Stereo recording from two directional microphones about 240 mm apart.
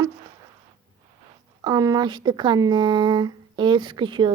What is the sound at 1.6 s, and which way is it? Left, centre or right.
Speech, centre.